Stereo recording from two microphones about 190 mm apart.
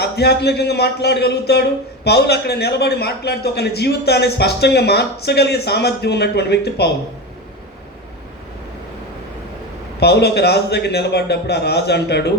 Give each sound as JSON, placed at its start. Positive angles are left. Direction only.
{"t": 0.0, "sound": "a man's voice", "side_deg": 60}
{"t": 10.0, "sound": "a man's voice", "side_deg": 60}